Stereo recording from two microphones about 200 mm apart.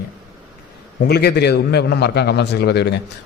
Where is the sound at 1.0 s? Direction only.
55° left (ahead or behind).